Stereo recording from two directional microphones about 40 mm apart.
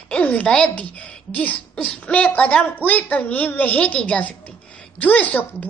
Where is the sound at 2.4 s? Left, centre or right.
Left.